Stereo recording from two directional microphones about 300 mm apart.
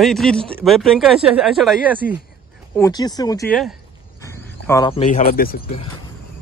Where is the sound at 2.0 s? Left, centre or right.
Left.